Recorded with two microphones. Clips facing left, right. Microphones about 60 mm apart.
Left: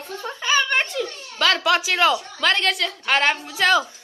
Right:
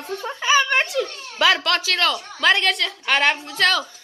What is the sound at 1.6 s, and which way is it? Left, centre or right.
Speech, centre.